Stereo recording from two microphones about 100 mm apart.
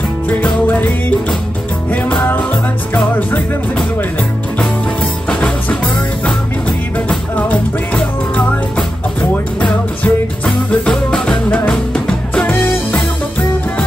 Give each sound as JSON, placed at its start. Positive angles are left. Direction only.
{"t": 0.3, "sound": "music", "side_deg": 15}
{"t": 5.3, "sound": "music", "side_deg": 15}
{"t": 7.1, "sound": "music", "side_deg": 15}